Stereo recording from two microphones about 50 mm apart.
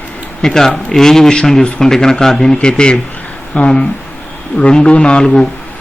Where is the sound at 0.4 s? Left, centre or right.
Centre.